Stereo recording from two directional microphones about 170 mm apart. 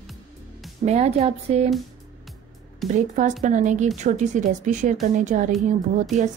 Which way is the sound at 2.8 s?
Centre (ahead or behind).